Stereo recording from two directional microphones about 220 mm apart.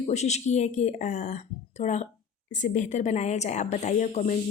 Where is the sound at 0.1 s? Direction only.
30° left (ahead or behind).